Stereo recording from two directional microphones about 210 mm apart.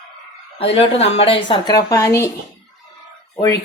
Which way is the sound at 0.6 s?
30° left (ahead or behind).